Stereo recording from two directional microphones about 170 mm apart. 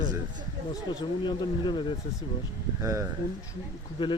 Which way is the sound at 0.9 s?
25° left (ahead or behind).